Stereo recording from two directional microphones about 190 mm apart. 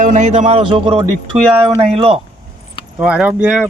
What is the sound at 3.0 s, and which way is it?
Speech, 5° right (ahead or behind).